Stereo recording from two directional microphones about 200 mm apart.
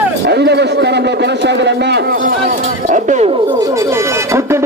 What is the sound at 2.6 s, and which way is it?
Speech, 35° right (ahead or behind).